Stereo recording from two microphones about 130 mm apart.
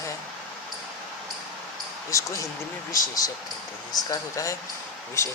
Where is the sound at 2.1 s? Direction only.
25° left (ahead or behind).